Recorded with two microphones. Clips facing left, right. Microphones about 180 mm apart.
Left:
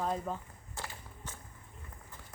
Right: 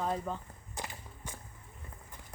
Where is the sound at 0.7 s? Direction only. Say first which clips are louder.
Right 2 dB; 15° right (ahead or behind).